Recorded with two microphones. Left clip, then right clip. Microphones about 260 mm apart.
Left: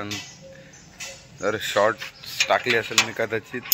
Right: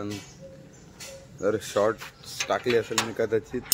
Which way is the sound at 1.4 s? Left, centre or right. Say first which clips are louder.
Left 3 dB; centre.